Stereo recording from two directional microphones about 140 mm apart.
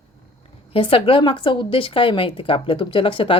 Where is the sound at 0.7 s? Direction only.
40° left (ahead or behind).